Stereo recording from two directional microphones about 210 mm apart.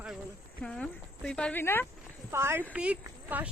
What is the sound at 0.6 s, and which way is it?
Speech, 5° left (ahead or behind).